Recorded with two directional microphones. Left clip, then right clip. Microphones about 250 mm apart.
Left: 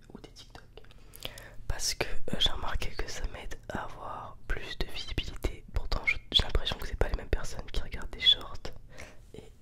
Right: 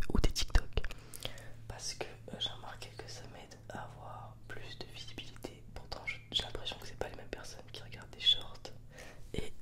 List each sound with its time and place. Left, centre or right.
0.0 s whispering: right
1.2 s whispering: centre
1.7 s whispering: left
9.3 s whispering: centre